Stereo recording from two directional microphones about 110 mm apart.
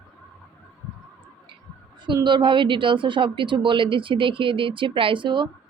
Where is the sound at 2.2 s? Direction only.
45° right (ahead or behind).